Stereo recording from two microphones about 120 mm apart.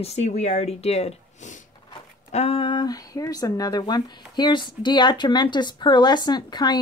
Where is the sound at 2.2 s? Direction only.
60° left (ahead or behind).